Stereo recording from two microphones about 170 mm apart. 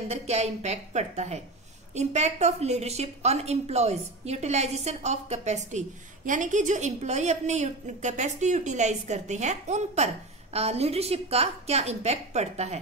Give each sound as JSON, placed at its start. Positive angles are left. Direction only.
{"t": 0.1, "sound": "a woman's voice", "side_deg": -40}